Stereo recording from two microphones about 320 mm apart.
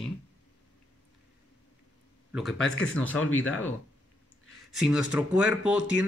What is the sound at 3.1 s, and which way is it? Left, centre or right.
Speech, left.